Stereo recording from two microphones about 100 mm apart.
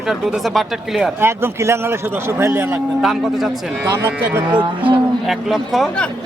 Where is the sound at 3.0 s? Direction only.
5° right (ahead or behind).